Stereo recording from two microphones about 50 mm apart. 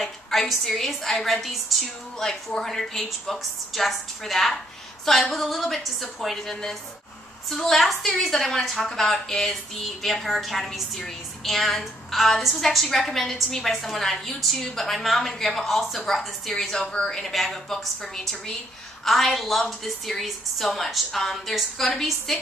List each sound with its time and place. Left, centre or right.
0.0 s a woman's voice: centre
2.1 s a woman's voice: centre